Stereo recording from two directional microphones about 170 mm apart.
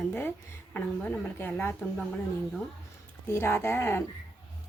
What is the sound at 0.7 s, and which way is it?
Speech, 10° left (ahead or behind).